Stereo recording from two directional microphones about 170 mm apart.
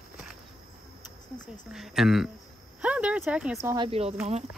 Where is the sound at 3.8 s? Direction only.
35° right (ahead or behind).